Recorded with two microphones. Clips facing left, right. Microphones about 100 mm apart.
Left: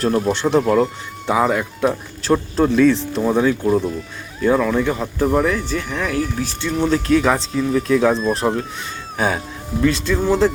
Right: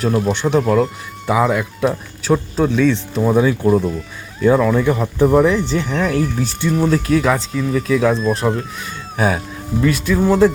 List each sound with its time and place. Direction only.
0.0 s speech: centre (ahead or behind)
5.5 s speech: 20° right (ahead or behind)
6.7 s speech: 5° right (ahead or behind)